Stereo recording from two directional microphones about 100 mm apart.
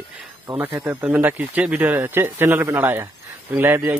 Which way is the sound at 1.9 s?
25° right (ahead or behind).